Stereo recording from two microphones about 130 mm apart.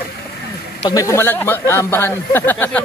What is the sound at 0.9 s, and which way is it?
Speech, 25° left (ahead or behind).